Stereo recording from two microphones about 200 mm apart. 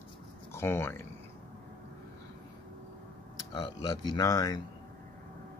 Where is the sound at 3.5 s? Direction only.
20° left (ahead or behind).